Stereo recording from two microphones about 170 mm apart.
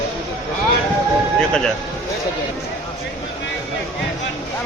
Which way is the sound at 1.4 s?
5° left (ahead or behind).